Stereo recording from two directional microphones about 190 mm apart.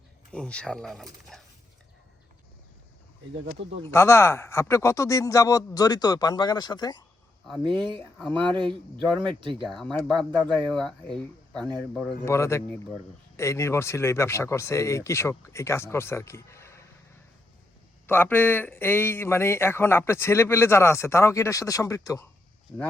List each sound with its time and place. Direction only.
0.3 s speech: 5° left (ahead or behind)
3.9 s speech: 15° left (ahead or behind)
7.4 s speech: centre (ahead or behind)
12.2 s speech: 15° left (ahead or behind)
18.0 s speech: 10° left (ahead or behind)